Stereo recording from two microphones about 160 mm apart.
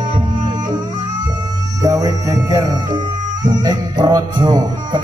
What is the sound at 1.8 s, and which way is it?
Music, 20° right (ahead or behind).